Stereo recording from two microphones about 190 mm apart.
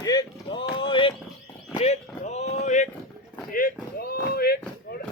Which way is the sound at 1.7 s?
35° left (ahead or behind).